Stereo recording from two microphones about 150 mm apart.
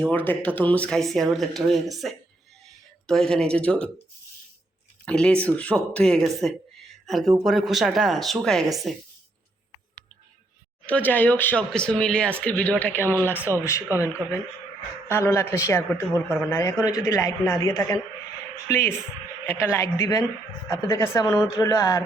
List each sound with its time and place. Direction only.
0.0 s speech: 10° left (ahead or behind)
5.0 s speech: 5° left (ahead or behind)
10.8 s speech: 10° left (ahead or behind)
15.0 s speech: 15° left (ahead or behind)